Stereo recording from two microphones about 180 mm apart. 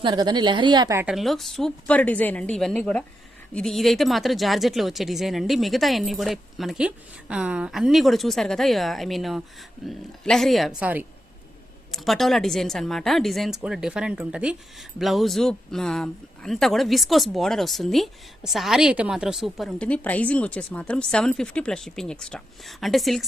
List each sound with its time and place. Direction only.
0.0 s a woman's voice: 25° right (ahead or behind)
1.0 s speech: centre (ahead or behind)